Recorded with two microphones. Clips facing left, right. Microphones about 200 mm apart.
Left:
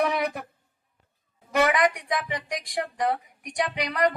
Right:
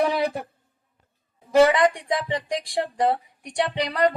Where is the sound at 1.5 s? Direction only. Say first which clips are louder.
Right 6 dB; 30° right (ahead or behind).